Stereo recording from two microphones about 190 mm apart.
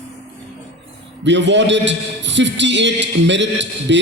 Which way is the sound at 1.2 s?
70° right (ahead or behind).